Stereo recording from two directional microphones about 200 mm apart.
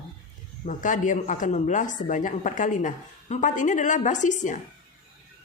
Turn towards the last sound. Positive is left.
turn(degrees=40)  # may be behind; listen again after turning